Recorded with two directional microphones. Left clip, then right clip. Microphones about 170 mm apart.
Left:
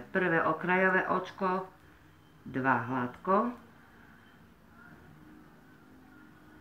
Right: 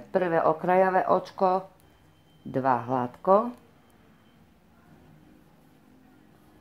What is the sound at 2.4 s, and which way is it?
Speech, 30° right (ahead or behind).